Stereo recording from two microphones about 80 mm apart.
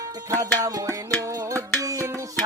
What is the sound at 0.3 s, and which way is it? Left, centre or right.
Music, right.